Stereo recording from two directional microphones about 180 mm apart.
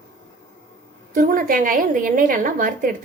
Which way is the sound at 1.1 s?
50° right (ahead or behind).